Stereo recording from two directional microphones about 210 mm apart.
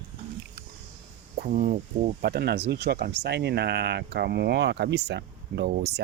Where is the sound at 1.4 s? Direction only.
35° right (ahead or behind).